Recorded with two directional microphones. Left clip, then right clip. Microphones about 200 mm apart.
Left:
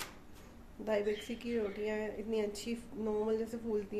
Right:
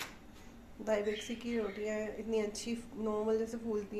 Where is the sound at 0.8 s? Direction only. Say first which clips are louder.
Even; 15° left (ahead or behind).